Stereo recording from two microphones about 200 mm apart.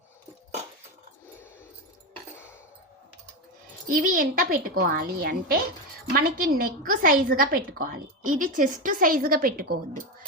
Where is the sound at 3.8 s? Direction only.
45° right (ahead or behind).